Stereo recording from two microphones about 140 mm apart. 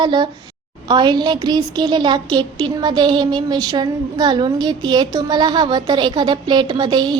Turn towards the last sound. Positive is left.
turn(degrees=-30)  # may be behind; listen again after turning